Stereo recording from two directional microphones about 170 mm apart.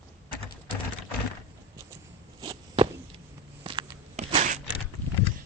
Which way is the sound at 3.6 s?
30° right (ahead or behind).